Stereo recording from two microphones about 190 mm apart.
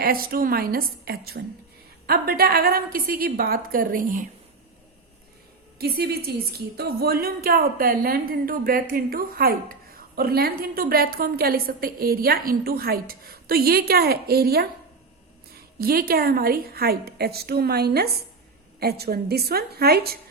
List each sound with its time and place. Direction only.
0.0 s a woman's voice: 50° right (ahead or behind)
5.8 s a woman's voice: 55° right (ahead or behind)